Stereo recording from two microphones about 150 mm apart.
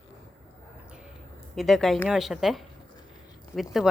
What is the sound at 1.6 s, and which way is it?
Speech, centre (ahead or behind).